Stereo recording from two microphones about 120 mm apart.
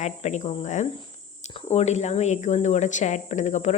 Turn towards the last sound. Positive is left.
turn(degrees=85)